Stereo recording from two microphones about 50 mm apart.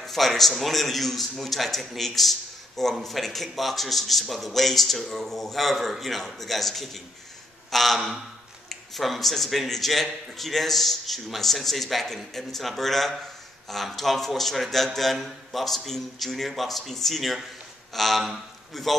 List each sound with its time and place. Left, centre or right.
0.0 s a man's voice: centre